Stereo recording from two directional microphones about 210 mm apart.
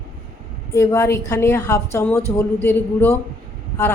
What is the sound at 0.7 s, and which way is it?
A woman's voice, 15° left (ahead or behind).